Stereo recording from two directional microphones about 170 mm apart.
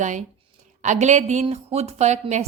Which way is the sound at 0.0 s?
45° right (ahead or behind).